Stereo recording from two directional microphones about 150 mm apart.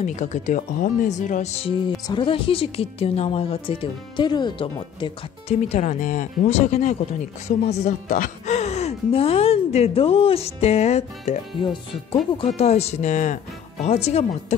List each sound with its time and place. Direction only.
0.0 s speech: 50° left (ahead or behind)
2.0 s a woman's voice: 35° left (ahead or behind)
5.5 s speech: 50° left (ahead or behind)
11.6 s a woman's voice: 35° left (ahead or behind)